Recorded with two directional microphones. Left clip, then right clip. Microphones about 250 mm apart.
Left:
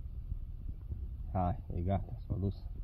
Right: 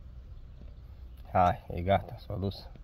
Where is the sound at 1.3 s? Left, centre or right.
Centre.